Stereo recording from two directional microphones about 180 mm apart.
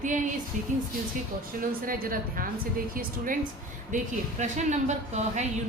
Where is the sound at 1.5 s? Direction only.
50° right (ahead or behind).